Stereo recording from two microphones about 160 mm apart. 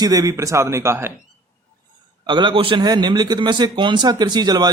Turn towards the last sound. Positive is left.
turn(degrees=-25)  # may be behind; listen again after turning